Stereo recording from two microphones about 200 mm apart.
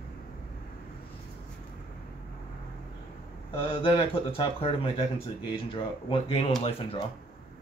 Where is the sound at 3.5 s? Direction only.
25° left (ahead or behind).